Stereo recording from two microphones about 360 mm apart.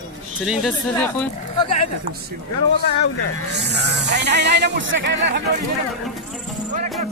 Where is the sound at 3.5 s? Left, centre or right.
Right.